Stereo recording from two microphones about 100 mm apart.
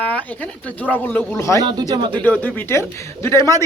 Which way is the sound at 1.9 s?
50° right (ahead or behind).